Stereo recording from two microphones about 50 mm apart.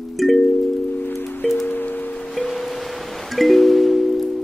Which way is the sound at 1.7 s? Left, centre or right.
Left.